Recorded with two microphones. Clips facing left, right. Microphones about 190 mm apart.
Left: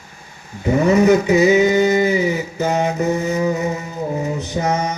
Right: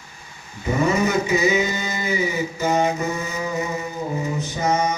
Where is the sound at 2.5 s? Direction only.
65° left (ahead or behind).